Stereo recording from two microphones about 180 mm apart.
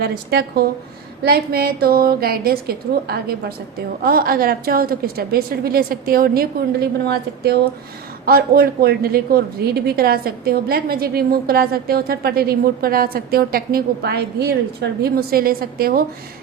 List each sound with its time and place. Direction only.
0.0 s a woman's voice: 60° right (ahead or behind)